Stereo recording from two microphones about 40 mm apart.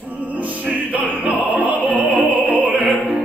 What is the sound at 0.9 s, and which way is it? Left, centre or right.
Opera, right.